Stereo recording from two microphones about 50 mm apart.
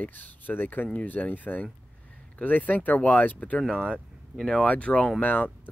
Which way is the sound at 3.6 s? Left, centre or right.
Centre.